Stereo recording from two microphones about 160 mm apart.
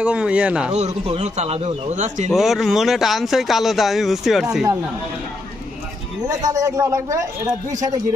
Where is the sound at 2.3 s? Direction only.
Centre (ahead or behind).